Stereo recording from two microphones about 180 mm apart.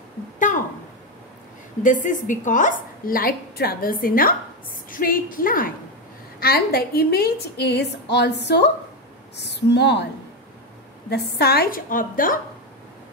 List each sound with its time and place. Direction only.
1.8 s a woman's voice: 45° left (ahead or behind); by 10.0 s 70° left (ahead or behind)
11.1 s a woman's voice: 65° left (ahead or behind)